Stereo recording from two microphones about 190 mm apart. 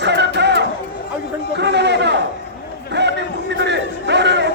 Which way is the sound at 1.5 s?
65° right (ahead or behind).